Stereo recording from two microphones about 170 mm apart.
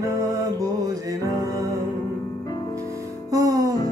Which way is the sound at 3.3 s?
20° right (ahead or behind).